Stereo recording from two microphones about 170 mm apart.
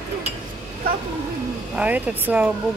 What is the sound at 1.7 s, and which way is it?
Speech, 10° right (ahead or behind).